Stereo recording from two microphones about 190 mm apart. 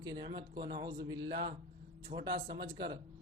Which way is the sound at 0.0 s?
25° right (ahead or behind).